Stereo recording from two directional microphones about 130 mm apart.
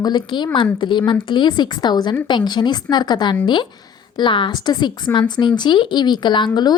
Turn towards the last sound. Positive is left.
turn(degrees=35)  # may be behind; listen again after turning